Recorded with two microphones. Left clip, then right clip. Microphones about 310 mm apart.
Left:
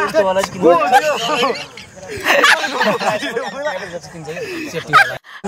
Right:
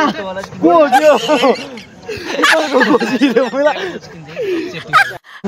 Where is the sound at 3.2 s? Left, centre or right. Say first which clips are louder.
Right 9 dB; right.